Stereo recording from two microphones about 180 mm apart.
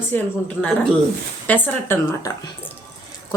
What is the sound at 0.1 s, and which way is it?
A woman's voice, 10° left (ahead or behind).